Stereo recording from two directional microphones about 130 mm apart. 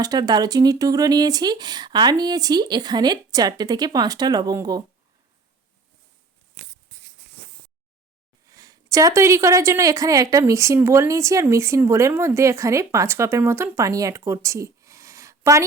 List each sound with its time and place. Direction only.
0.0 s speech: 30° right (ahead or behind)
8.4 s a woman's voice: 25° right (ahead or behind)